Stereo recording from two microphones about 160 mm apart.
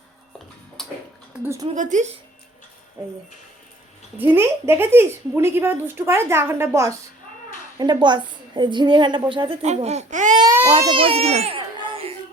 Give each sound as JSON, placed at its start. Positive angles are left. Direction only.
{"t": 0.8, "sound": "a sound", "side_deg": 0}
{"t": 1.3, "sound": "speech", "side_deg": -15}
{"t": 1.7, "sound": "speech", "side_deg": -50}
{"t": 4.2, "sound": "a woman's voice", "side_deg": -15}
{"t": 10.4, "sound": "baby cry", "side_deg": -15}
{"t": 10.8, "sound": "baby cry", "side_deg": -35}